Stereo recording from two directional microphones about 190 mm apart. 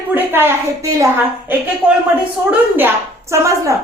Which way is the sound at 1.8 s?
5° right (ahead or behind).